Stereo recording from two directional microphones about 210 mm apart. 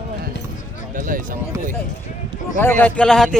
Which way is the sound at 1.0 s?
40° right (ahead or behind).